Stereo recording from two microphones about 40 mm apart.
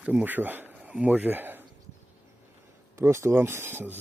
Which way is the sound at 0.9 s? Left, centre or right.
Right.